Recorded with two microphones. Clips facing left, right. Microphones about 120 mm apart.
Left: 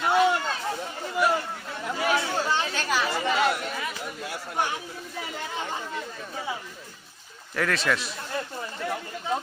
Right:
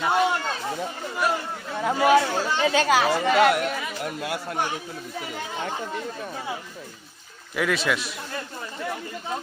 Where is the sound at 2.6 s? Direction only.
90° right; by 4.3 s 75° right (ahead or behind).